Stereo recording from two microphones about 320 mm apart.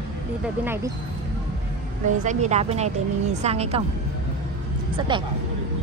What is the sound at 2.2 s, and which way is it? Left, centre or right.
A woman's voice, right.